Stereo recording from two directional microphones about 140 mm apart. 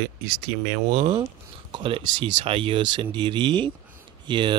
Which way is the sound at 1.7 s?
35° right (ahead or behind).